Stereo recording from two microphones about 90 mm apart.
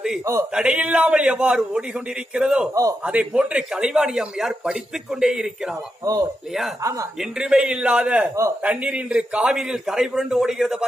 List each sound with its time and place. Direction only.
0.2 s a man's voice: 35° right (ahead or behind)
0.5 s a man's voice: 10° right (ahead or behind)
2.7 s a man's voice: 35° right (ahead or behind)
3.0 s a man's voice: 15° right (ahead or behind)
6.0 s a man's voice: 40° right (ahead or behind)
7.2 s a man's voice: 10° right (ahead or behind)